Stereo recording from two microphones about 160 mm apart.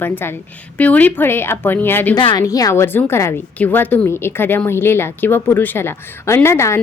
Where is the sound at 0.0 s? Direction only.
15° left (ahead or behind).